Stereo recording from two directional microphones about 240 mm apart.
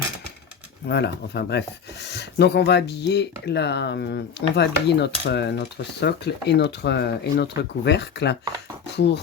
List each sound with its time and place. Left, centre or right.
0.9 s speech: left